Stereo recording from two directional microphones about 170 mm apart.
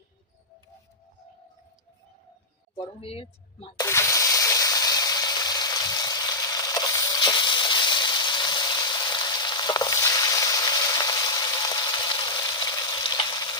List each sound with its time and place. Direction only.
2.7 s speech: 35° left (ahead or behind)
3.8 s water: 15° left (ahead or behind)